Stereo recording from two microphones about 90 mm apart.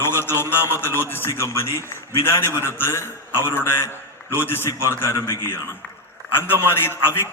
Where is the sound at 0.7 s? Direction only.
25° left (ahead or behind).